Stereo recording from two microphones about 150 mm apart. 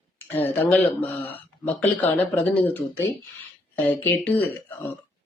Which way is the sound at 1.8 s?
10° left (ahead or behind).